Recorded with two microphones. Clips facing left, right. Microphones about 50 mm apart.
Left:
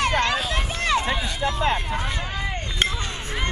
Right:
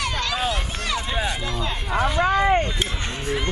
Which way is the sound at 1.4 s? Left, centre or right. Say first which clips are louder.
Left 5 dB; left.